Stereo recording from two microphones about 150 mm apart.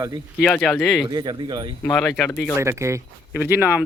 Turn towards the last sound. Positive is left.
turn(degrees=-10)  # may be behind; listen again after turning